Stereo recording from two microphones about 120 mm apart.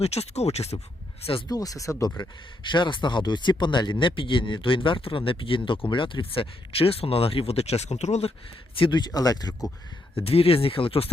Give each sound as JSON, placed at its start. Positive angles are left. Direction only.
{"t": 0.0, "sound": "speech", "side_deg": 60}
{"t": 1.2, "sound": "speech", "side_deg": 50}
{"t": 1.5, "sound": "speech", "side_deg": 30}
{"t": 2.6, "sound": "speech", "side_deg": 40}
{"t": 8.8, "sound": "speech", "side_deg": 35}
{"t": 10.2, "sound": "speech", "side_deg": 55}